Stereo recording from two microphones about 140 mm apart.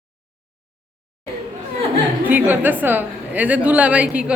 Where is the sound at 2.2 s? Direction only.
15° right (ahead or behind).